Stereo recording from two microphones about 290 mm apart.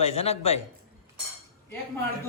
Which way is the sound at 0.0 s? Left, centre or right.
Left.